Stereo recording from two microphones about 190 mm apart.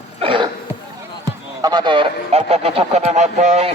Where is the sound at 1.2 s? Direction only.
20° right (ahead or behind); by 3.7 s 35° right (ahead or behind).